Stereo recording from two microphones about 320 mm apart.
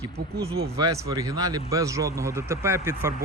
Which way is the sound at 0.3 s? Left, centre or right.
Right.